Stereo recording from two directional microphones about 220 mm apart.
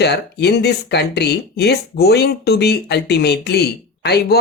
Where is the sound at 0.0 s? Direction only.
50° left (ahead or behind).